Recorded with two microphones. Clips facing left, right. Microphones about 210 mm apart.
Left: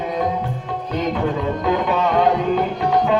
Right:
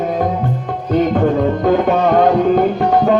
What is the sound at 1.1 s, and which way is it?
Music, 50° right (ahead or behind).